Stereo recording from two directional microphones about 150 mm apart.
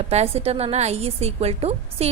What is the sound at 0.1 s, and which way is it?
A woman's voice, 45° right (ahead or behind).